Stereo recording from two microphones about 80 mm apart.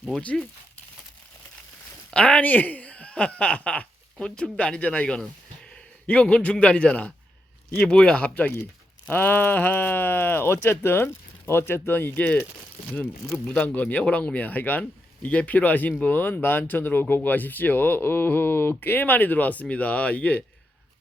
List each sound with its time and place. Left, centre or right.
0.2 s speech: centre
2.0 s a man's voice: centre
13.5 s speech: centre